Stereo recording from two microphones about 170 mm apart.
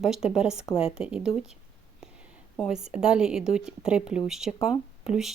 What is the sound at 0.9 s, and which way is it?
Speech, 5° right (ahead or behind).